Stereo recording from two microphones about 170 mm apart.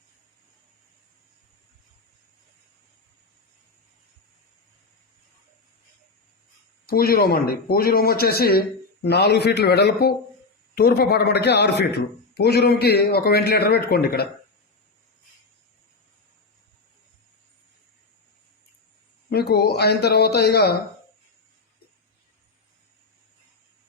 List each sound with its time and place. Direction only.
6.8 s a man's voice: 60° left (ahead or behind)
19.3 s a man's voice: 65° left (ahead or behind)